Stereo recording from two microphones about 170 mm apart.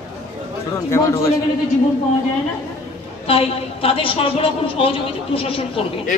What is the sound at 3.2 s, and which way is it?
A woman's voice, 35° left (ahead or behind).